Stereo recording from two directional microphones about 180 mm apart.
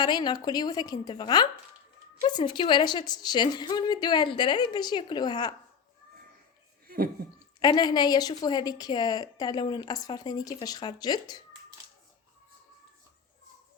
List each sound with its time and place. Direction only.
0.0 s a woman's voice: 25° left (ahead or behind)
6.8 s a sound: 55° right (ahead or behind)
7.6 s a woman's voice: 25° left (ahead or behind)